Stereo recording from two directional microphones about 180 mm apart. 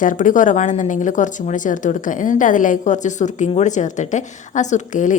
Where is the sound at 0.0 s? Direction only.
45° left (ahead or behind).